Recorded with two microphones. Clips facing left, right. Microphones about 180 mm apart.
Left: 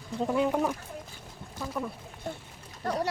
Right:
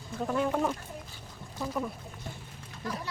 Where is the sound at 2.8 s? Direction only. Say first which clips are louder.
Left 7 dB; 70° left (ahead or behind).